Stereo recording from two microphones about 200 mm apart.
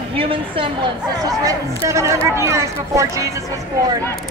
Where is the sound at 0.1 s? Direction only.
25° right (ahead or behind).